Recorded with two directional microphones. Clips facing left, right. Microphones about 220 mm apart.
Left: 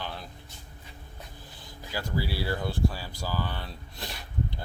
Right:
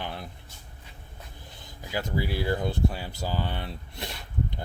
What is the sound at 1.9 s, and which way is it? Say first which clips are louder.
Speech: right 2 dB; 20° right (ahead or behind).